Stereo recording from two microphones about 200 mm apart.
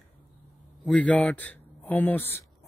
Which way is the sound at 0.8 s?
5° left (ahead or behind).